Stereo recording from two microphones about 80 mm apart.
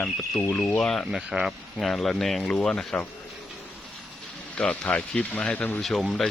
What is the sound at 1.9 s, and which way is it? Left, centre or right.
Speech, centre.